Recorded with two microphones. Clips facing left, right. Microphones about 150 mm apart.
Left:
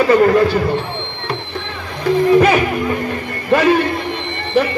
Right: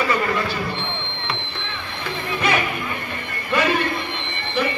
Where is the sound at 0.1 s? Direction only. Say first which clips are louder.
Left 11 dB; 55° left (ahead or behind).